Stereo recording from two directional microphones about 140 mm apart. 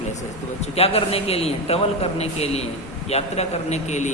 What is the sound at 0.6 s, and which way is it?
A man's voice, 45° left (ahead or behind).